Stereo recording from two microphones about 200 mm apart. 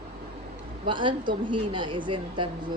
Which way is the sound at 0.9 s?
25° right (ahead or behind).